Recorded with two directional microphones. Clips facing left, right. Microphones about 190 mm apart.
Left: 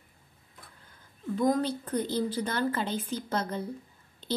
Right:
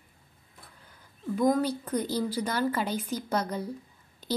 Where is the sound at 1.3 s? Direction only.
10° right (ahead or behind).